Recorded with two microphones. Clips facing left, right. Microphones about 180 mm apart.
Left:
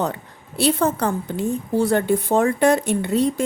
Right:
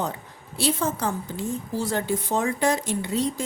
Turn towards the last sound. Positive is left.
turn(degrees=60)  # may be behind; listen again after turning